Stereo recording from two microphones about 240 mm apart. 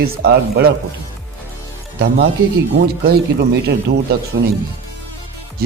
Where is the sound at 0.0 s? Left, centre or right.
Right.